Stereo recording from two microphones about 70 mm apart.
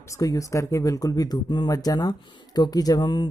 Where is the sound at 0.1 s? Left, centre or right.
Left.